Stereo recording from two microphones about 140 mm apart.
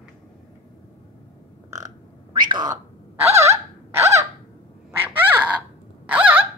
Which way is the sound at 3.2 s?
20° right (ahead or behind).